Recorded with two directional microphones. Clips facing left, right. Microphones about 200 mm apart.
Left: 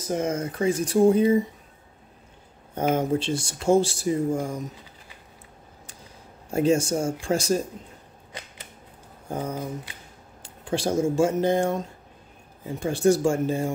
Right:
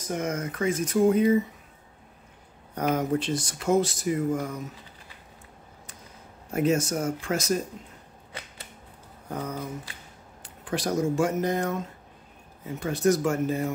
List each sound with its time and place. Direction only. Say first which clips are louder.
0.0 s speech: left 3 dB; 30° left (ahead or behind)
2.7 s speech: left 2 dB; 25° left (ahead or behind)
6.5 s speech: left 3 dB; 30° left (ahead or behind)
9.3 s speech: left 3 dB; 30° left (ahead or behind)